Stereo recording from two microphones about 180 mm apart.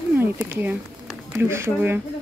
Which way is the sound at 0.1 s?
10° right (ahead or behind).